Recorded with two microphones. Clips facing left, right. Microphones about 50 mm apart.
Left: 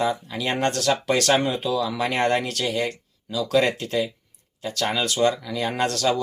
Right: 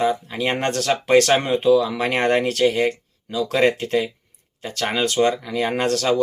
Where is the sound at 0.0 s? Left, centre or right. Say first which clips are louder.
Right 3 dB; right.